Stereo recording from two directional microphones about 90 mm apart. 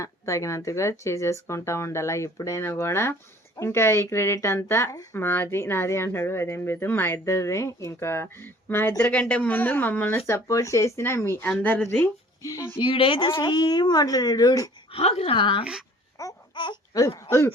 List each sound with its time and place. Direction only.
0.0 s speech: 35° left (ahead or behind)
9.0 s speech: 15° left (ahead or behind); by 11.4 s 30° left (ahead or behind)
11.4 s speech: 15° left (ahead or behind)
12.4 s speech: 40° left (ahead or behind)
12.8 s a woman's voice: 75° left (ahead or behind); by 14.7 s 40° left (ahead or behind)
14.9 s speech: 90° left; by 15.6 s 65° left (ahead or behind)
16.2 s babbling: 35° left (ahead or behind)
16.6 s a sound: 60° left (ahead or behind)
16.9 s speech: 40° left (ahead or behind)